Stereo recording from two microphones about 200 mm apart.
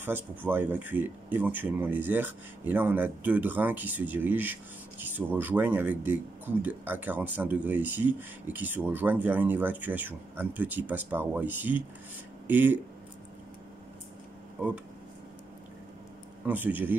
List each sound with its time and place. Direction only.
0.0 s speech: 10° right (ahead or behind)
14.6 s speech: 10° right (ahead or behind)
16.4 s speech: 10° right (ahead or behind)